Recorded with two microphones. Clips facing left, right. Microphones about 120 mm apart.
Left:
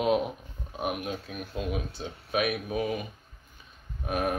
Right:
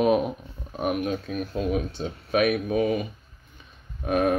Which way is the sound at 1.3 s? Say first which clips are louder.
Right 7 dB; 45° right (ahead or behind).